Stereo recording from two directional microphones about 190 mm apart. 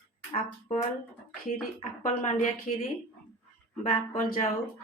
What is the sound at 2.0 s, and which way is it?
Speech, 40° left (ahead or behind).